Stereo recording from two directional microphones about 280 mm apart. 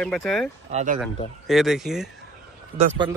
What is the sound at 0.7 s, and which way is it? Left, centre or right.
Speech, right.